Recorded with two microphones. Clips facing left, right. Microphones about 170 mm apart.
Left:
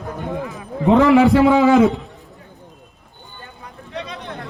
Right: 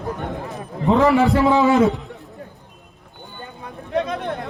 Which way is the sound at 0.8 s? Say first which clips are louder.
Left 3 dB; 80° left.